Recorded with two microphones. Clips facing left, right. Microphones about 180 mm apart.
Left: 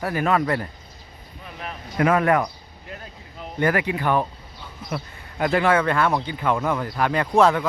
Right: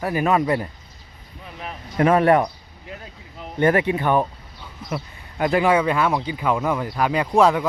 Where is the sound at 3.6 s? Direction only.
25° right (ahead or behind).